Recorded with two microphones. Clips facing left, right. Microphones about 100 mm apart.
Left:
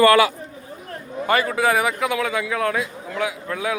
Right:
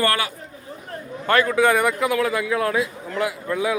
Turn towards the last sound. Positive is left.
turn(degrees=0)  # may be behind; listen again after turning